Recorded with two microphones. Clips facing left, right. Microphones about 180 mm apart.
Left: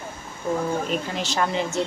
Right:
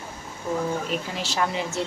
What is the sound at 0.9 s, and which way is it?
Speech, 5° right (ahead or behind).